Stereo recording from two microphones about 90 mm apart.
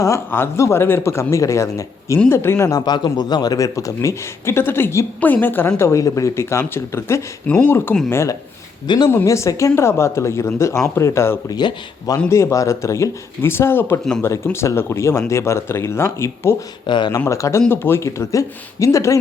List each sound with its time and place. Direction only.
0.3 s a man's voice: 25° left (ahead or behind)
2.6 s a man's voice: 50° left (ahead or behind); by 7.2 s 30° left (ahead or behind)
7.4 s speech: 15° left (ahead or behind)
8.1 s a man's voice: 30° left (ahead or behind)
11.4 s speech: 50° left (ahead or behind)
12.3 s a man's voice: 35° left (ahead or behind)
16.8 s speech: 60° left (ahead or behind)
17.1 s a man's voice: 35° left (ahead or behind)